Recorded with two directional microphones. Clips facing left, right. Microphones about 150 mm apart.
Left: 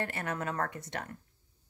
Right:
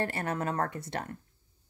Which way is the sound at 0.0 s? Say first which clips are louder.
Right 3 dB; 30° right (ahead or behind).